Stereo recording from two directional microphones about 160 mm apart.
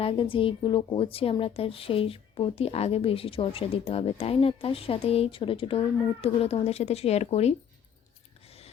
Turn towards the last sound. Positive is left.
turn(degrees=40)  # may be behind; listen again after turning